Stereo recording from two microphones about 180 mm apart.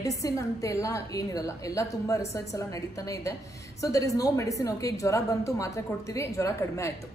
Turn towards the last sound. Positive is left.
turn(degrees=15)  # may be behind; listen again after turning